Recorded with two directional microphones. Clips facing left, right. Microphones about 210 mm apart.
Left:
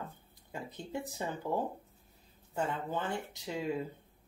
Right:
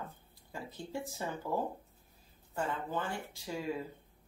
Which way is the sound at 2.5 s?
20° left (ahead or behind).